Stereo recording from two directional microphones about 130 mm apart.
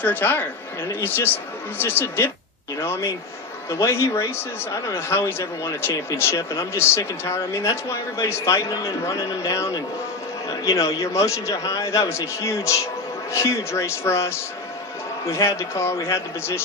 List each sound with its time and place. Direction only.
0.0 s speech: 15° left (ahead or behind)